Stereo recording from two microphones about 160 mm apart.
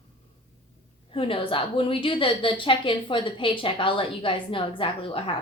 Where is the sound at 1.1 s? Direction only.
35° left (ahead or behind).